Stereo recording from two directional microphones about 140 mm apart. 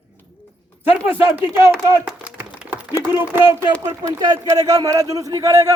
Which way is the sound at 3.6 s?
15° right (ahead or behind).